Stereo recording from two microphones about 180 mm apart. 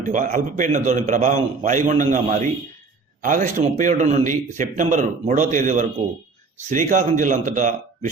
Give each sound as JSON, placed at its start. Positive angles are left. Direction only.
{"t": 0.0, "sound": "speech", "side_deg": -45}